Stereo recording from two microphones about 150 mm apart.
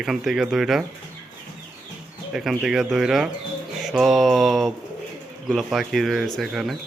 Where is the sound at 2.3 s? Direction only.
5° right (ahead or behind).